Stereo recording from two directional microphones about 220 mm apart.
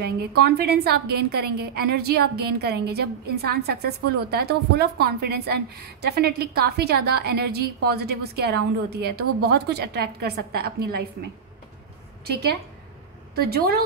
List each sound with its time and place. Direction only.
0.0 s a woman's voice: 45° right (ahead or behind)
12.3 s a woman's voice: 45° right (ahead or behind)